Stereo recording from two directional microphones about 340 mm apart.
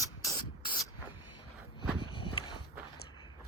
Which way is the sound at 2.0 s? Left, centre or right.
Centre.